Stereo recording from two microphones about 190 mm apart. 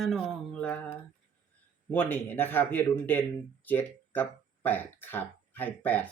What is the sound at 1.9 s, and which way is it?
Speech, 10° left (ahead or behind).